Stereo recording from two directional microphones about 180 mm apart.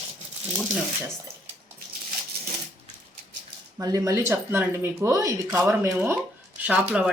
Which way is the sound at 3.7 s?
15° right (ahead or behind).